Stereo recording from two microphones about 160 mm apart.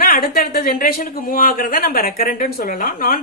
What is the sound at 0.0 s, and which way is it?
A woman's voice, 70° left (ahead or behind).